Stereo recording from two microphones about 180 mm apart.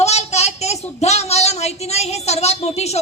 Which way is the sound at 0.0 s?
35° left (ahead or behind).